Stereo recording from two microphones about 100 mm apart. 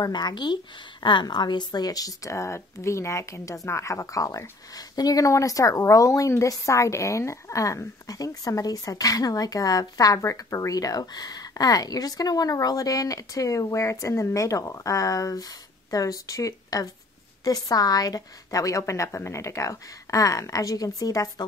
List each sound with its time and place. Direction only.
0.0 s speech: 45° left (ahead or behind)